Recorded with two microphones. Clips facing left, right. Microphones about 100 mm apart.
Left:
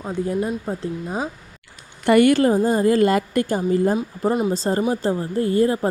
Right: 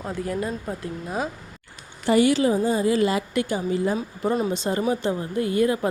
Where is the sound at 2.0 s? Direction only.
55° left (ahead or behind).